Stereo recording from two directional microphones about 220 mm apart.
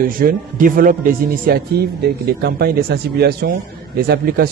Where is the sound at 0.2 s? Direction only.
40° right (ahead or behind).